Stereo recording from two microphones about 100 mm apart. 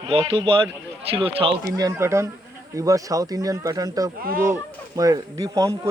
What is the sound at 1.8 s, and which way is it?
Speech, 30° right (ahead or behind).